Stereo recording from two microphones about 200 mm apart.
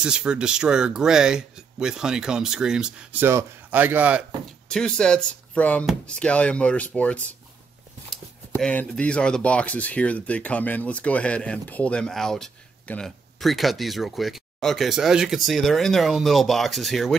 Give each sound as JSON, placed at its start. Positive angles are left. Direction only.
{"t": 0.0, "sound": "speech", "side_deg": -5}
{"t": 4.6, "sound": "speech", "side_deg": 5}